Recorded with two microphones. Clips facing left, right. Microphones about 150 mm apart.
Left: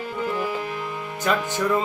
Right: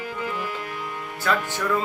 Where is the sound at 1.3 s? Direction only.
20° left (ahead or behind).